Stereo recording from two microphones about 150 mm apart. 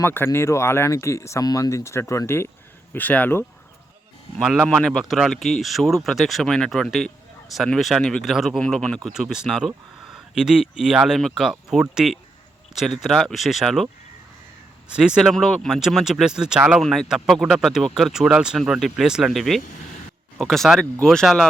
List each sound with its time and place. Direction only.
0.0 s speech: 15° left (ahead or behind)
4.4 s speech: centre (ahead or behind)
14.9 s speech: 5° right (ahead or behind)